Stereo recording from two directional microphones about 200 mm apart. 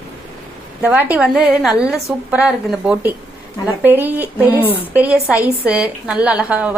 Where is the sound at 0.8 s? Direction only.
5° right (ahead or behind).